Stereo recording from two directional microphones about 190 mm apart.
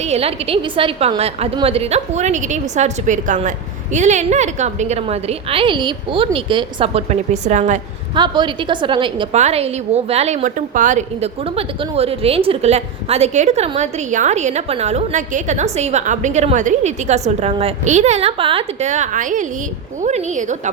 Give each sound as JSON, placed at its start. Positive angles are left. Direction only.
{"t": 0.0, "sound": "a woman's voice", "side_deg": -35}
{"t": 8.1, "sound": "a woman's voice", "side_deg": -25}